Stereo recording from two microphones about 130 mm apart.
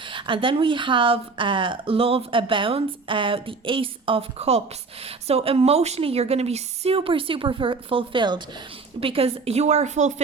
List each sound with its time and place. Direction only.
0.1 s a woman's voice: 40° right (ahead or behind); by 10.1 s 65° right (ahead or behind)